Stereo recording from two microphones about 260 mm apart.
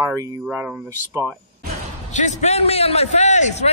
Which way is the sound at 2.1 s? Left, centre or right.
Left.